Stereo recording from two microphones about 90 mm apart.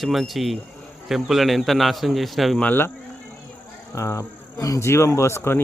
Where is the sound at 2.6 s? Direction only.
20° left (ahead or behind).